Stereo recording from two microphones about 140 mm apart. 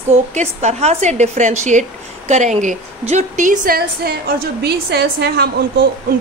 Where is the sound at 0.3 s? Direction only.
55° right (ahead or behind); by 3.8 s 80° right.